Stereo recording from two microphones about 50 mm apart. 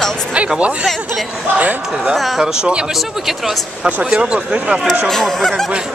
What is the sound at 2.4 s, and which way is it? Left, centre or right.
Speech, centre.